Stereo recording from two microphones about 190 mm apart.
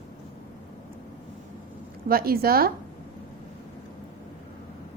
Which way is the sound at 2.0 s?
50° right (ahead or behind).